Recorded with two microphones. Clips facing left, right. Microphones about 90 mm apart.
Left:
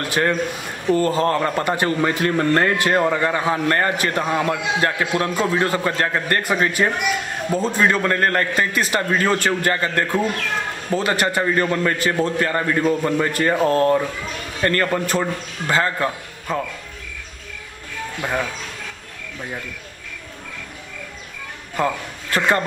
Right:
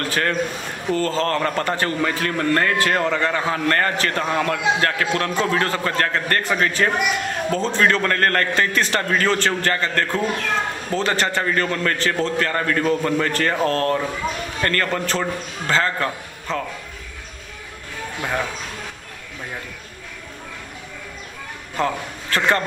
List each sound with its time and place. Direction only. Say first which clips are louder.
0.0 s a man's voice: left 2 dB; 15° left (ahead or behind)
21.7 s a man's voice: left 1 dB; 15° left (ahead or behind)